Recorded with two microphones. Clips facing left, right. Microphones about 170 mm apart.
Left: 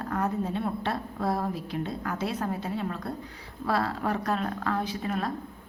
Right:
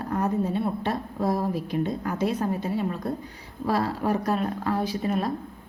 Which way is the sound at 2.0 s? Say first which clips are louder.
Right 5 dB; 25° right (ahead or behind).